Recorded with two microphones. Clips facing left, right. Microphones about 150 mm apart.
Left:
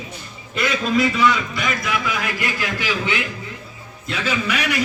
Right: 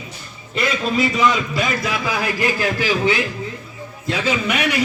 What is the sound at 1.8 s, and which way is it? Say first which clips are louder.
A man's voice: right 2 dB; 35° right (ahead or behind).